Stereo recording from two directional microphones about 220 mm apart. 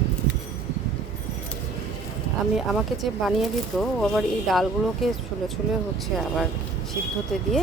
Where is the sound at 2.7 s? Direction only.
Centre (ahead or behind).